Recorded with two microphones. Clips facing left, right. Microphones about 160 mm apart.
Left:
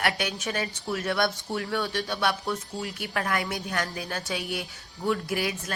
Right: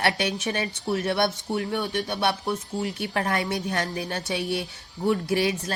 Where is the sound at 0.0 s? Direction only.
25° right (ahead or behind).